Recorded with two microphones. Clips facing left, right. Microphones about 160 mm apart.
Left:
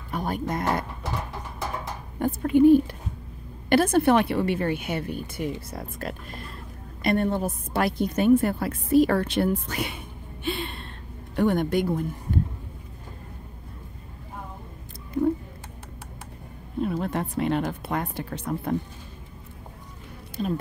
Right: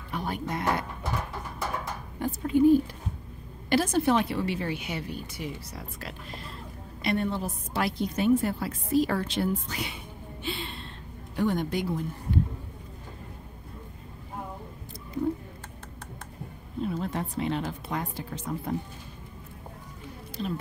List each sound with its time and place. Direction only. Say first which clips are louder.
0.1 s speech: left 4 dB; 45° left (ahead or behind)
2.1 s a woman's voice: left 4 dB; 55° left (ahead or behind)
3.6 s a woman's voice: left 5 dB; 55° left (ahead or behind)
10.4 s gasp: left 5 dB; 55° left (ahead or behind)
11.3 s a woman's voice: left 5 dB; 55° left (ahead or behind)
16.8 s a woman's voice: left 4 dB; 60° left (ahead or behind)
20.4 s speech: left 5 dB; 45° left (ahead or behind)